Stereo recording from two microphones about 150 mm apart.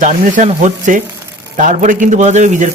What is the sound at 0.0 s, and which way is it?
A man's voice, 55° right (ahead or behind).